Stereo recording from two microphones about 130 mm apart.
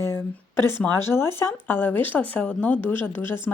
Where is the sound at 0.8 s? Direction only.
20° left (ahead or behind).